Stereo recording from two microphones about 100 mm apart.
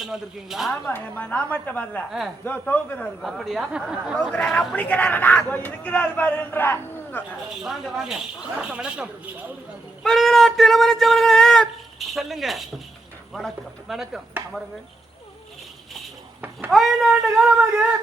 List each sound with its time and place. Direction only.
0.0 s speech: 5° right (ahead or behind)
0.7 s a man's voice: 20° left (ahead or behind)
3.2 s a man's voice: centre (ahead or behind); by 7.3 s 20° left (ahead or behind)
7.5 s speech: 5° right (ahead or behind)
10.0 s speech: centre (ahead or behind)
16.6 s speech: centre (ahead or behind)